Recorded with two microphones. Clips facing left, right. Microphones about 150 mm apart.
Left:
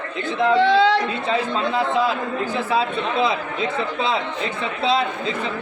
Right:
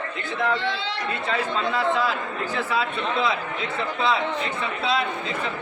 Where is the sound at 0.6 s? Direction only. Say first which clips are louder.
Left 13 dB; 90° left.